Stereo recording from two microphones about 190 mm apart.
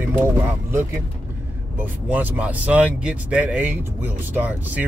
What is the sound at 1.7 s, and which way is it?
Speech, 10° right (ahead or behind).